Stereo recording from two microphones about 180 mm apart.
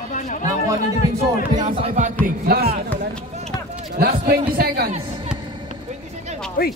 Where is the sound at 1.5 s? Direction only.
45° right (ahead or behind).